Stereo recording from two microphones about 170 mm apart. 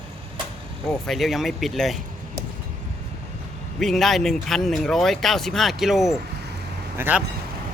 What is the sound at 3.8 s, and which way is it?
Speech, centre (ahead or behind).